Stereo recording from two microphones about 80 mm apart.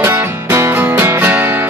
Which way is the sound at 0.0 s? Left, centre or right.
Right.